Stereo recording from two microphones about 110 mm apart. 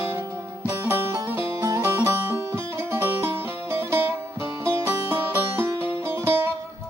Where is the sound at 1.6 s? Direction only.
30° right (ahead or behind).